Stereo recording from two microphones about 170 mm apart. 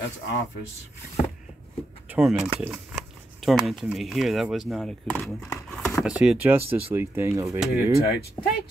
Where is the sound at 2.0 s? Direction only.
5° right (ahead or behind).